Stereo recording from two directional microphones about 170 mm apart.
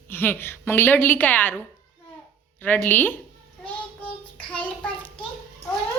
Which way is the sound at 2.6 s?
10° left (ahead or behind).